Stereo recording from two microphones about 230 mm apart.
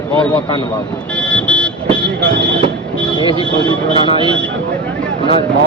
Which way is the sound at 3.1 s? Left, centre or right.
Centre.